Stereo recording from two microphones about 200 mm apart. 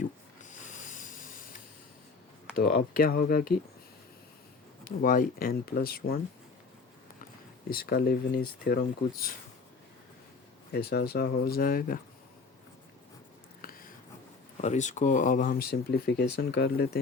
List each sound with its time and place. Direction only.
0.4 s a sound: 40° left (ahead or behind)
2.6 s speech: 45° left (ahead or behind)
4.9 s speech: 45° left (ahead or behind)
7.7 s speech: 50° left (ahead or behind)
10.7 s speech: 50° left (ahead or behind)
13.6 s a sound: 45° left (ahead or behind)
14.6 s speech: 35° left (ahead or behind); by 17.0 s 50° left (ahead or behind)